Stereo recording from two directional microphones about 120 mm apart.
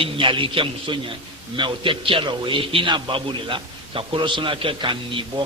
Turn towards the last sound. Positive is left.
turn(degrees=-40)  # may be behind; listen again after turning